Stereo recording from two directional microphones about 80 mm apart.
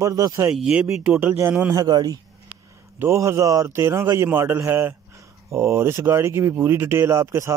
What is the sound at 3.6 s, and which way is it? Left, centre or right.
Speech, right.